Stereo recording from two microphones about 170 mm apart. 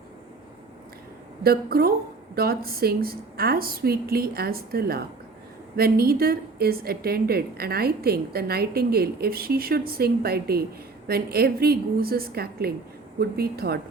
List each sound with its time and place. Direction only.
1.5 s a woman's voice: 65° right (ahead or behind)